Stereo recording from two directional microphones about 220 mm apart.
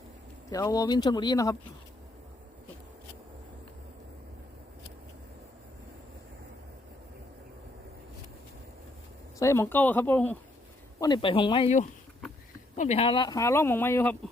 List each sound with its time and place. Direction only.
0.5 s speech: 15° left (ahead or behind)
9.4 s speech: 10° left (ahead or behind)
11.0 s speech: 20° left (ahead or behind)